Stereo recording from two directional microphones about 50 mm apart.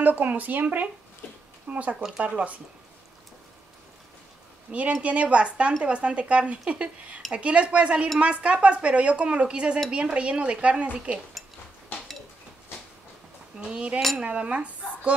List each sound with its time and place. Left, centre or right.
0.0 s speech: right
4.6 s speech: right
13.6 s cutlery: centre
14.1 s speech: right